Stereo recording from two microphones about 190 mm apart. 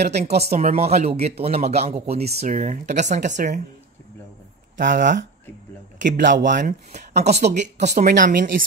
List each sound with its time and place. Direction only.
0.4 s speech: 35° right (ahead or behind)
4.7 s speech: 45° right (ahead or behind)